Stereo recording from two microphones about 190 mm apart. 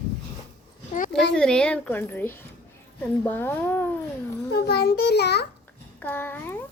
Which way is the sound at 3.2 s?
10° left (ahead or behind).